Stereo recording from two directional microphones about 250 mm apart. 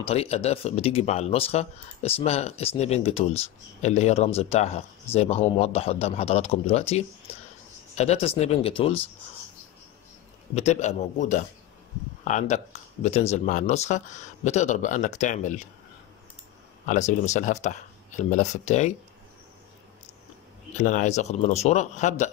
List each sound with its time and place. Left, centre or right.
0.0 s speech: left
10.5 s speech: left
16.8 s speech: left
20.7 s speech: left